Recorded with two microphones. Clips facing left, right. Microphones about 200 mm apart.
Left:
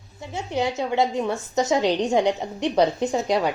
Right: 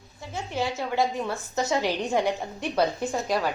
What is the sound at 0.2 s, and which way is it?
A woman's voice, 20° left (ahead or behind).